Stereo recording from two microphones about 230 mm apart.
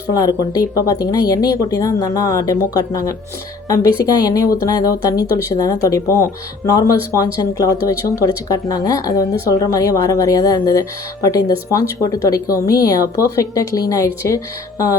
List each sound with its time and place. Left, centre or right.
0.1 s a woman's voice: centre